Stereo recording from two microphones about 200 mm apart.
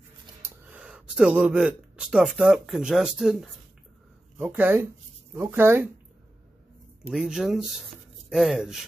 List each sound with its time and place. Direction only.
0.4 s speech: 5° right (ahead or behind)
7.1 s speech: 5° right (ahead or behind)